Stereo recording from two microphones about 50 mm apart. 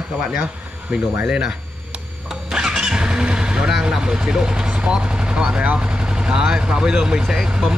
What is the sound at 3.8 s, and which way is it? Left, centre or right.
Speech, centre.